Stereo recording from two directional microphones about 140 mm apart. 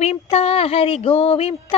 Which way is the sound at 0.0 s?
50° left (ahead or behind).